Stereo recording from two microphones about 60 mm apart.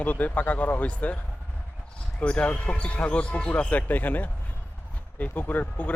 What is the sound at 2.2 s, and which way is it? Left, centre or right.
Speech, left.